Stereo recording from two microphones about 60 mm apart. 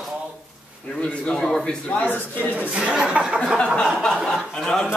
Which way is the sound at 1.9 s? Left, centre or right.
Left.